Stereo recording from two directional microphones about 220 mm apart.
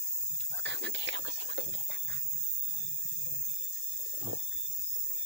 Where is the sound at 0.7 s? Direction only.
50° right (ahead or behind).